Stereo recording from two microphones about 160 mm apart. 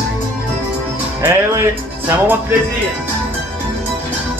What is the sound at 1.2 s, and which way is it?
Music, 15° right (ahead or behind).